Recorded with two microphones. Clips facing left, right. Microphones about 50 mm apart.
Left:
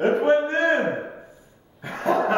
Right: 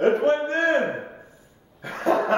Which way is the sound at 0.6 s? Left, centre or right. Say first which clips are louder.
Left 1 dB; centre.